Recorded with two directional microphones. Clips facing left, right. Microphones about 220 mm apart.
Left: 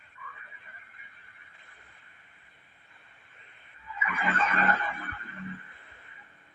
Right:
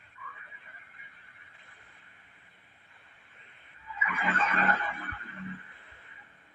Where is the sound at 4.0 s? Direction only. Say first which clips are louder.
Left 1 dB; 45° left (ahead or behind).